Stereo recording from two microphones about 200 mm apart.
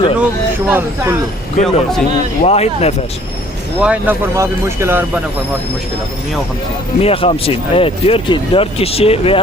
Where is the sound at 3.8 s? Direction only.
5° right (ahead or behind).